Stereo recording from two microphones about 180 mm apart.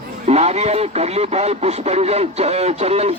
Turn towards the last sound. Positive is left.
turn(degrees=-35)  # may be behind; listen again after turning